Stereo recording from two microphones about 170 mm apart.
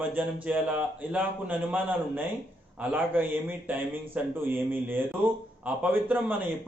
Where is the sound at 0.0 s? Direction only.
10° right (ahead or behind).